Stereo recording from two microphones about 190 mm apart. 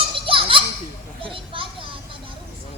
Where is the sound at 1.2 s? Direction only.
25° right (ahead or behind).